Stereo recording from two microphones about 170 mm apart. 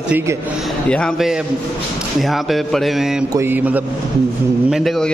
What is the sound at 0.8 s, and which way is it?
A man's voice, 5° left (ahead or behind).